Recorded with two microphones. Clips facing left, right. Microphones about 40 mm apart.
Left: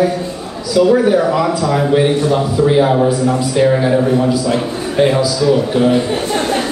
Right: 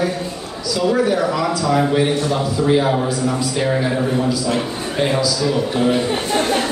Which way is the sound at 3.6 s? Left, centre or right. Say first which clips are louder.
Left 8 dB; centre.